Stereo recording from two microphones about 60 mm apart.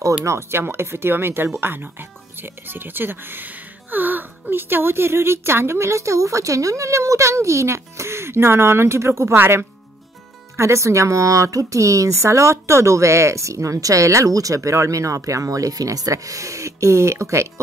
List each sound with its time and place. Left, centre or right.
0.2 s speech: right
0.5 s speech: right
10.5 s speech: right